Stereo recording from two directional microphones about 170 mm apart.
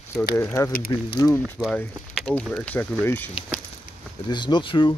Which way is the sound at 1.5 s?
Centre (ahead or behind).